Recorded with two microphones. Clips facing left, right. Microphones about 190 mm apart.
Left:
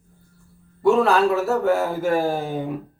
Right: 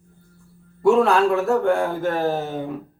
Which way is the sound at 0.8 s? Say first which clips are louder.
Right 1 dB; centre (ahead or behind).